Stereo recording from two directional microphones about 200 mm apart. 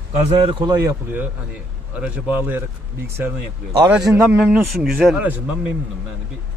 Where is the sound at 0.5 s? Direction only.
25° right (ahead or behind).